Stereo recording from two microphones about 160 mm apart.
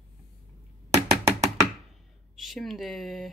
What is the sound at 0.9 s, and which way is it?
Knock, 20° right (ahead or behind).